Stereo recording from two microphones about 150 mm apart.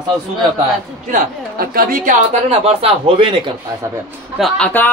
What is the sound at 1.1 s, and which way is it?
Speech, 70° right (ahead or behind).